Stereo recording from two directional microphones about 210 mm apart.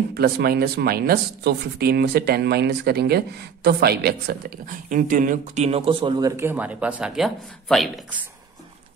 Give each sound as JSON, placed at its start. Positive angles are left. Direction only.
{"t": 0.1, "sound": "speech", "side_deg": -45}